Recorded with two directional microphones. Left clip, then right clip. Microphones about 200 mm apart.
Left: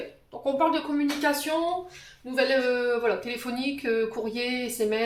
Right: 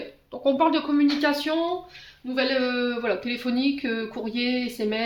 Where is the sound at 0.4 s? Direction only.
50° right (ahead or behind).